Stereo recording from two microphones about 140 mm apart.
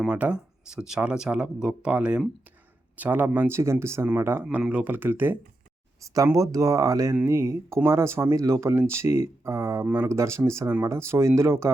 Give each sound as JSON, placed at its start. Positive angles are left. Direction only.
{"t": 0.0, "sound": "speech", "side_deg": -5}